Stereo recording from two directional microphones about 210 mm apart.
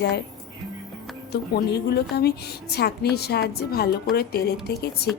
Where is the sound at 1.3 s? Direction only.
50° left (ahead or behind).